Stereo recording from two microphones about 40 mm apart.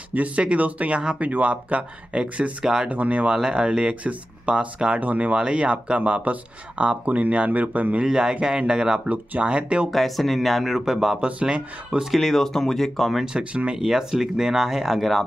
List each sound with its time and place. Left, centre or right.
0.4 s speech: right
2.6 s speech: centre
2.9 s speech: right
3.3 s speech: centre
4.0 s speech: right
4.6 s speech: right
5.0 s speech: right
5.3 s speech: right
8.0 s speech: centre
9.8 s speech: centre
11.2 s speech: right
12.1 s speech: centre
13.2 s speech: centre